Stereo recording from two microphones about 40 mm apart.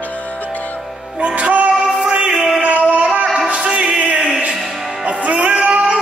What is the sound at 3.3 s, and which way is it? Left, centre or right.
Music, right.